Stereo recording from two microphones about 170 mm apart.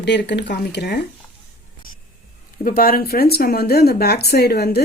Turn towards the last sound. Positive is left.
turn(degrees=70)  # may be behind; listen again after turning